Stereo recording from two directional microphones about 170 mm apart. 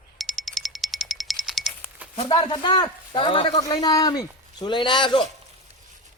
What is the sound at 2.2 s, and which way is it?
Speech, 30° left (ahead or behind).